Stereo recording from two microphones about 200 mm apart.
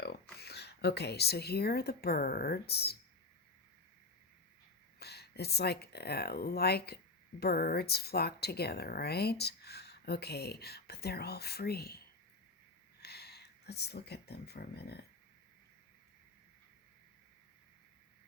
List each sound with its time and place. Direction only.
0.3 s speech: 55° left (ahead or behind)
4.9 s speech: 55° left (ahead or behind)